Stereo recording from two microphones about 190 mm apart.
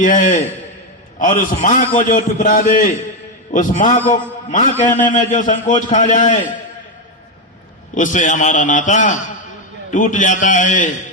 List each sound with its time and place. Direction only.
0.0 s a man's voice: 40° left (ahead or behind)
7.9 s a man's voice: 40° left (ahead or behind)